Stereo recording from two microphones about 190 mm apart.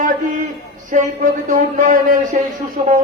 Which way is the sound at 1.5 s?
45° right (ahead or behind).